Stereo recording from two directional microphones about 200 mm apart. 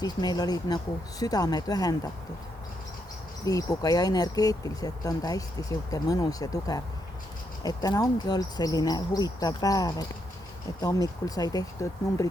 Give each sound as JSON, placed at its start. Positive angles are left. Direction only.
{"t": 0.0, "sound": "speech", "side_deg": 20}
{"t": 3.4, "sound": "speech", "side_deg": 15}